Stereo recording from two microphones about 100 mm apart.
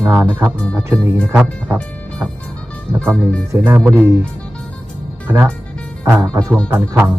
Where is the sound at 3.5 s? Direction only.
25° right (ahead or behind).